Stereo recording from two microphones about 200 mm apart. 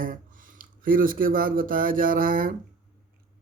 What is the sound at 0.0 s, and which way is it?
Speech, 45° right (ahead or behind).